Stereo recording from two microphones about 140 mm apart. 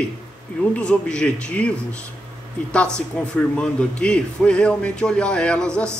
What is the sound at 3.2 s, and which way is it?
Speech, 10° left (ahead or behind).